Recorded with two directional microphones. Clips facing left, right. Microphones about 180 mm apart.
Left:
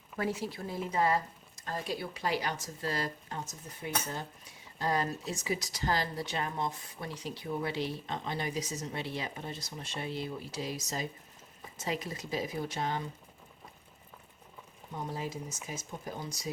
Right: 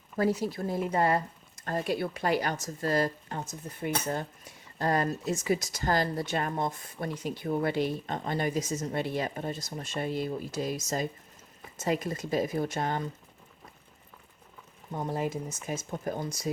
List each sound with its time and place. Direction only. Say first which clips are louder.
0.2 s speech: right 7 dB; 40° right (ahead or behind)
14.9 s speech: right 6 dB; 55° right (ahead or behind)